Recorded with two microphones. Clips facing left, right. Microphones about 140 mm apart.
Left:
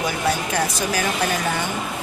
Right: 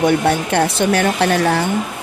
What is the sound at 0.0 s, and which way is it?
Speech, 65° right (ahead or behind).